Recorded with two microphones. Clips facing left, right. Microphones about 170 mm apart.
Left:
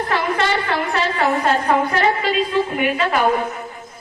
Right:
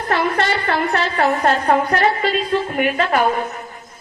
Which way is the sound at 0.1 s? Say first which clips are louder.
Right 3 dB; 45° right (ahead or behind).